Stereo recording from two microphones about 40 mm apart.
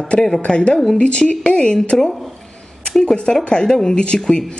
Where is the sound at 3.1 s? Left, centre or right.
Left.